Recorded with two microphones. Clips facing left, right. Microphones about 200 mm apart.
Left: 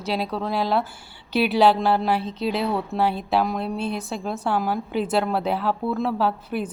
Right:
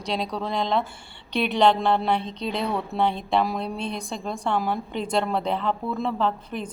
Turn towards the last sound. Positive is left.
turn(degrees=5)  # may be behind; listen again after turning